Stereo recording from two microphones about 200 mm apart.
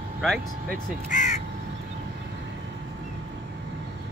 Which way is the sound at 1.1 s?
35° left (ahead or behind).